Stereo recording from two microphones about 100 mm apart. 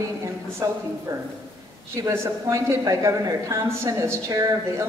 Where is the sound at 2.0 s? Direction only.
25° right (ahead or behind).